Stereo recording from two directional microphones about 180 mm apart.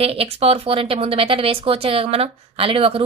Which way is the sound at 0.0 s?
35° right (ahead or behind).